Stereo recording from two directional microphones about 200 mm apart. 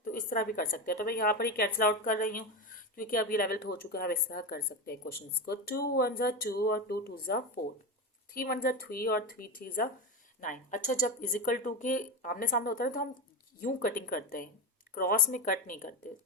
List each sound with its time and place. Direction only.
0.0 s speech: 40° left (ahead or behind)